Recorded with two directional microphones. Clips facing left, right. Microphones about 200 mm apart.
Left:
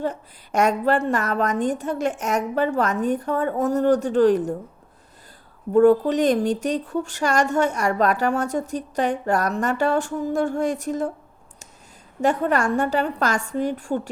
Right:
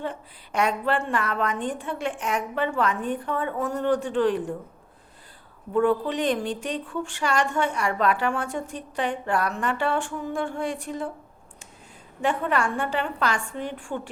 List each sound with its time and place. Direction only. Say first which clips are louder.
0.0 s speech: left 5 dB; 40° left (ahead or behind)
5.7 s speech: left 7 dB; 40° left (ahead or behind)
12.2 s speech: left 4 dB; 40° left (ahead or behind)